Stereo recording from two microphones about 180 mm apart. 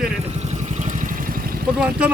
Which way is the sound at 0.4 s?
40° right (ahead or behind).